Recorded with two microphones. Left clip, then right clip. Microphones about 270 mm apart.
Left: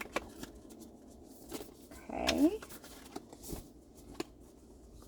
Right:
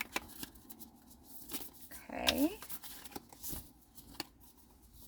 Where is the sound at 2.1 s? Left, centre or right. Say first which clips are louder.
Left 3 dB; right.